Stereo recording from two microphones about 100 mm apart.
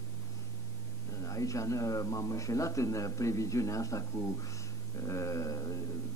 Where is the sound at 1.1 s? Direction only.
30° left (ahead or behind).